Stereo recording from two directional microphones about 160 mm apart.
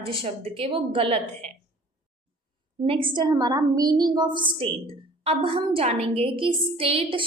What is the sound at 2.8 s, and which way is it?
A woman's voice, 35° right (ahead or behind).